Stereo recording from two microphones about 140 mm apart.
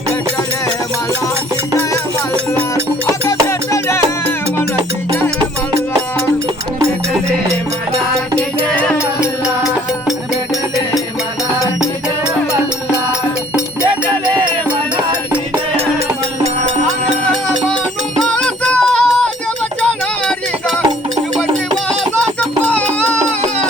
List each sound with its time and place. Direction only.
3.1 s music: 20° left (ahead or behind)
7.9 s music: 5° left (ahead or behind)
15.3 s music: 15° right (ahead or behind)
16.4 s music: 55° right (ahead or behind)
18.2 s music: 5° left (ahead or behind)
22.4 s music: 10° left (ahead or behind)